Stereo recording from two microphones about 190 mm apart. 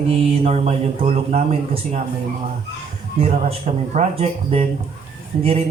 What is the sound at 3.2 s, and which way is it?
Speech, 35° right (ahead or behind).